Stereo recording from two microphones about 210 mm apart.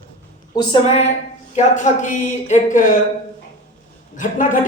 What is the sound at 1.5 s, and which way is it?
Speech, 35° left (ahead or behind).